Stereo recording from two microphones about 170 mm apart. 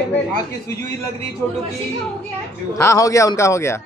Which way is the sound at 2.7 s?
20° left (ahead or behind).